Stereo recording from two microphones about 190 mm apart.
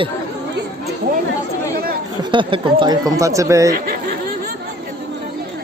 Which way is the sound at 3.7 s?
50° right (ahead or behind).